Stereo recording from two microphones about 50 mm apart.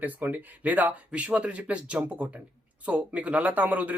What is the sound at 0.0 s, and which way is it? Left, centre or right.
A man's voice, right.